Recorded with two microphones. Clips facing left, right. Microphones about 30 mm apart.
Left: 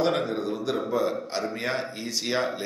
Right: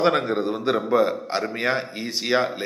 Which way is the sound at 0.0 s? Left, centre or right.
Right.